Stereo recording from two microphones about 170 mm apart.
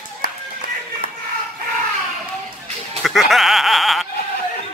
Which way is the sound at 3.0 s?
Centre (ahead or behind).